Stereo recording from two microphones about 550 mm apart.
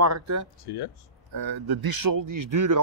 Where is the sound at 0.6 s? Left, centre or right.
Left.